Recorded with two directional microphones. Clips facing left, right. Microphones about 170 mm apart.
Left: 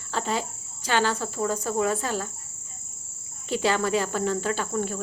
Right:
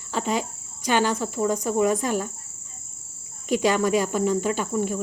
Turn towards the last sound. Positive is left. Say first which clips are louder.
# right 3 dB
turn(degrees=-10)  # may be behind; listen again after turning